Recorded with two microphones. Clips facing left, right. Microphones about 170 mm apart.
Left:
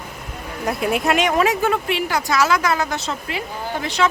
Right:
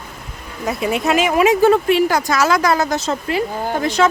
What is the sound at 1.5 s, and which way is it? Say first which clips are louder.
Speech: right 7 dB; 35° right (ahead or behind).